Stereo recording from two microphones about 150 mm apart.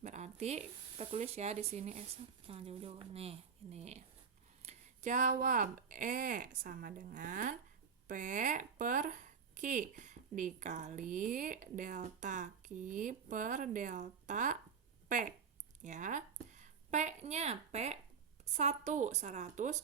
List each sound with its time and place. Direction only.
0.0 s speech: 50° right (ahead or behind)
4.6 s a sound: 50° right (ahead or behind)
5.9 s speech: 60° right (ahead or behind)
15.8 s a woman's voice: 55° right (ahead or behind)